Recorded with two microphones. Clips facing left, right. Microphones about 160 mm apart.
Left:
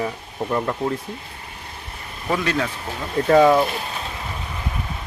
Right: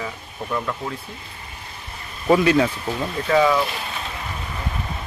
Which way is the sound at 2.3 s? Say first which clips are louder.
Right 6 dB; 10° right (ahead or behind).